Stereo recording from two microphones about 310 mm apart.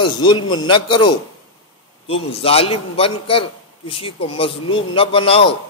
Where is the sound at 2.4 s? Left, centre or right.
Centre.